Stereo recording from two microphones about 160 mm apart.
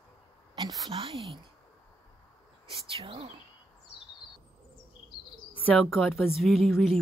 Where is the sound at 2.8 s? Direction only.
35° right (ahead or behind).